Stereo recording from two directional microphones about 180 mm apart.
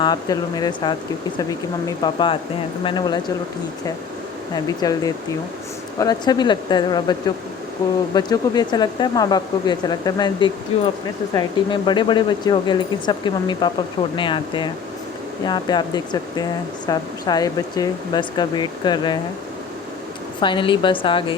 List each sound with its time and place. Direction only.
0.0 s speech: 25° left (ahead or behind)
2.0 s speech: 25° left (ahead or behind)
4.5 s speech: 20° left (ahead or behind)
20.4 s speech: 25° left (ahead or behind)